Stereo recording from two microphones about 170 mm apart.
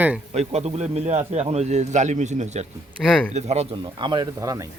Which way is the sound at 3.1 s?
5° left (ahead or behind).